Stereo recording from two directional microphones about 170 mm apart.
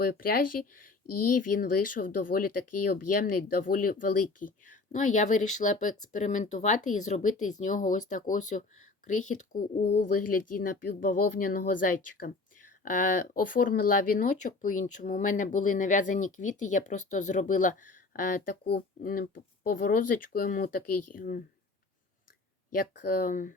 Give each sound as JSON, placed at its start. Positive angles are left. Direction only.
{"t": 0.0, "sound": "speech", "side_deg": 60}
{"t": 22.7, "sound": "speech", "side_deg": 55}